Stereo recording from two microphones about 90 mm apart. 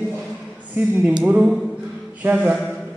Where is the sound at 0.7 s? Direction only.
25° right (ahead or behind).